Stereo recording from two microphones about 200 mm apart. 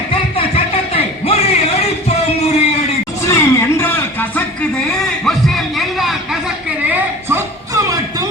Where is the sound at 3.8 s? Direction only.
10° left (ahead or behind).